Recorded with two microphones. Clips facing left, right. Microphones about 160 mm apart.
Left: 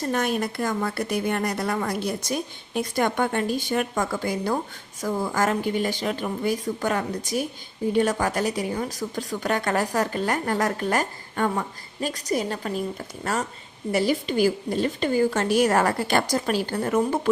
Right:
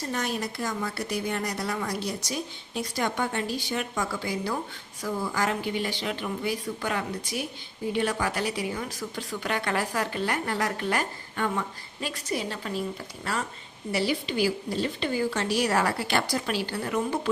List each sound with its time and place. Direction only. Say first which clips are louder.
0.1 s a woman's voice: left 6 dB; 55° left (ahead or behind)